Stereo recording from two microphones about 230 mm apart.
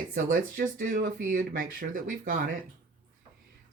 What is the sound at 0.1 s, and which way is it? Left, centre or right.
Speech, right.